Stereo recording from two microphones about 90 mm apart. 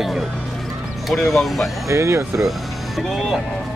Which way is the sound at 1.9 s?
35° right (ahead or behind).